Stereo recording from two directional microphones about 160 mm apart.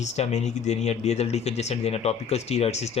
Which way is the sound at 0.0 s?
45° left (ahead or behind).